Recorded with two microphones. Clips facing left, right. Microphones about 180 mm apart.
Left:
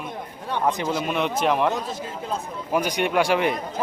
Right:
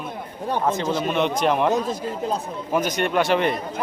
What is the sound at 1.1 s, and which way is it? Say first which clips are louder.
Speech: right 2 dB; 5° left (ahead or behind).